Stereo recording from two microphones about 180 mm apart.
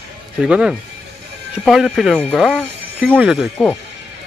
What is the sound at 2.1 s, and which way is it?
Speech, 5° left (ahead or behind).